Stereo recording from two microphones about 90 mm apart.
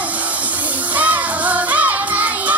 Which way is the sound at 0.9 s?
15° right (ahead or behind).